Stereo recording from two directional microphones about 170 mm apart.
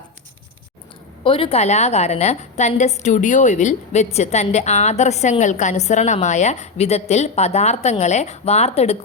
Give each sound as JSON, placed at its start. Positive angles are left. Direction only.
{"t": 1.2, "sound": "a woman's voice", "side_deg": 35}